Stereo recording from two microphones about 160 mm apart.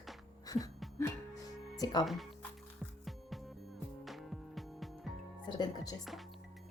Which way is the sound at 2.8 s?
Centre (ahead or behind).